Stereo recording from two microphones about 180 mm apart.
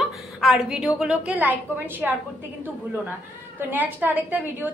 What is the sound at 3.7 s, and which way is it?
A woman's voice, 10° right (ahead or behind).